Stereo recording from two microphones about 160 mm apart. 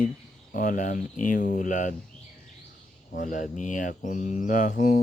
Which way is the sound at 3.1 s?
55° left (ahead or behind).